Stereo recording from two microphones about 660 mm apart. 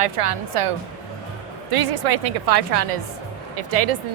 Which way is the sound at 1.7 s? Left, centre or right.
Right.